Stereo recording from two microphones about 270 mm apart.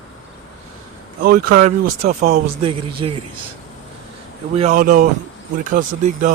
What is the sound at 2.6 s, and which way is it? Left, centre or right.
Speech, right.